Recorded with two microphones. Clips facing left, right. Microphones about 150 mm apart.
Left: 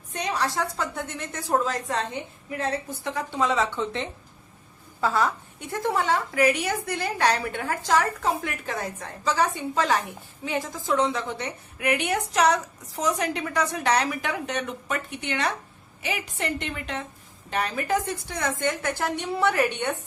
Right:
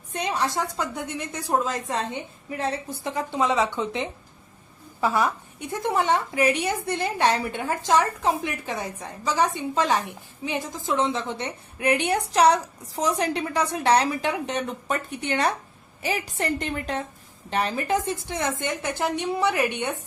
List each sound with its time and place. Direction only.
0.2 s a woman's voice: 25° right (ahead or behind)